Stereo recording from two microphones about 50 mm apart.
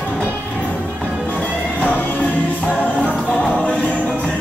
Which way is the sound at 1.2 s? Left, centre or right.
Left.